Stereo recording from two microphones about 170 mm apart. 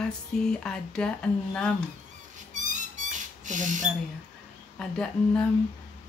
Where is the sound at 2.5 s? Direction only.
50° right (ahead or behind).